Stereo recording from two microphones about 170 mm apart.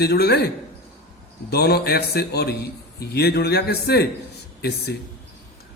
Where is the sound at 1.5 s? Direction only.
70° left (ahead or behind).